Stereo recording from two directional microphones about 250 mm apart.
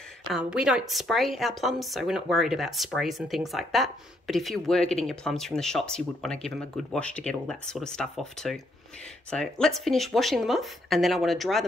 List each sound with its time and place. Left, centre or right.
0.3 s a woman's voice: centre